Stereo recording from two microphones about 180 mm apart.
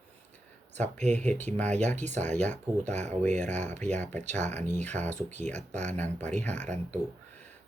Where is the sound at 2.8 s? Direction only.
40° right (ahead or behind).